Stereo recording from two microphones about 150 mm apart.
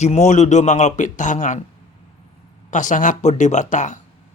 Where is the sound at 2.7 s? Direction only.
55° left (ahead or behind).